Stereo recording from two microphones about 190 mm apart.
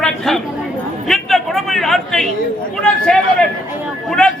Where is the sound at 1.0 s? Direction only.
Centre (ahead or behind).